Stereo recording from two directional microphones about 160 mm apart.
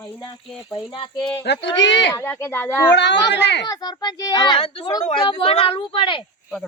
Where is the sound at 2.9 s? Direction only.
90° left.